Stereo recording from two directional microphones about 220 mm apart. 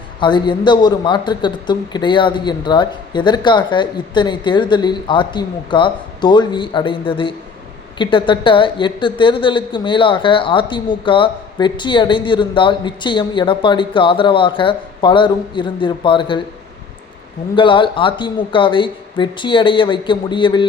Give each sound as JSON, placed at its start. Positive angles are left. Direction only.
{"t": 0.2, "sound": "a woman's voice", "side_deg": 20}
{"t": 17.5, "sound": "a woman's voice", "side_deg": 20}